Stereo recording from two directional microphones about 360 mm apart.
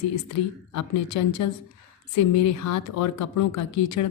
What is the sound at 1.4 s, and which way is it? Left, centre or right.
Speech, left.